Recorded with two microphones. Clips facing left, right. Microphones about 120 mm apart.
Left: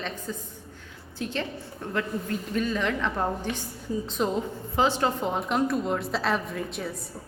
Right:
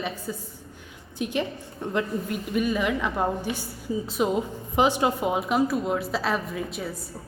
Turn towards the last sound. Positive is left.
turn(degrees=0)  # may be behind; listen again after turning